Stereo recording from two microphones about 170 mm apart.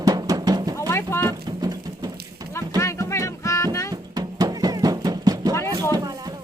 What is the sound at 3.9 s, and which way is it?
Music, 20° right (ahead or behind).